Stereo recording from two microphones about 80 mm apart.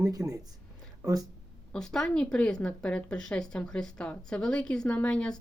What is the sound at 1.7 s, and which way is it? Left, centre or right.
A woman's voice, centre.